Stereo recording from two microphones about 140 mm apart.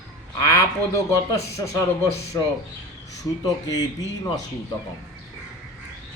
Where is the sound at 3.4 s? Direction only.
25° left (ahead or behind).